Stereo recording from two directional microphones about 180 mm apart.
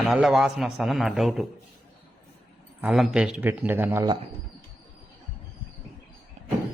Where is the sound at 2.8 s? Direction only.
5° right (ahead or behind).